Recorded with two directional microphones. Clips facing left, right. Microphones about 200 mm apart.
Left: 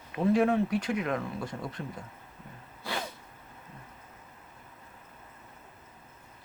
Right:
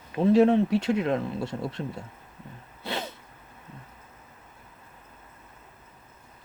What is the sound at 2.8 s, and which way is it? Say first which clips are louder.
Sneeze: right 3 dB; 25° right (ahead or behind).